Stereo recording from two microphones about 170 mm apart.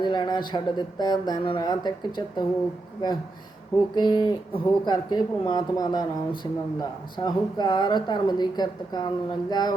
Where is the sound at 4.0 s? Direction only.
25° left (ahead or behind).